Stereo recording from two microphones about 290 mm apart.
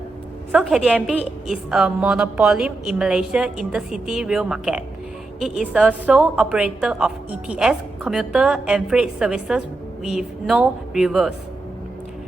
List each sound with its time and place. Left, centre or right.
0.5 s a woman's voice: centre